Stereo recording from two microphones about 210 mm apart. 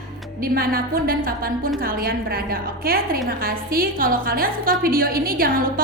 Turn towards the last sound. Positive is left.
turn(degrees=-45)  # may be behind; listen again after turning